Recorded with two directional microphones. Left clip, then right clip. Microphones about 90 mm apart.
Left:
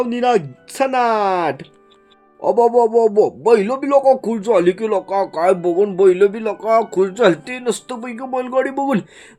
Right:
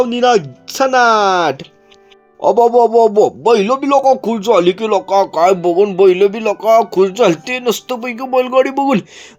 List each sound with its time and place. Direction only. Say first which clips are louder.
0.0 s speech: right 5 dB; 15° right (ahead or behind)